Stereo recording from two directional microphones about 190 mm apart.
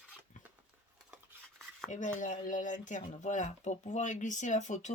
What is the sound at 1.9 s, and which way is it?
Speech, 40° left (ahead or behind).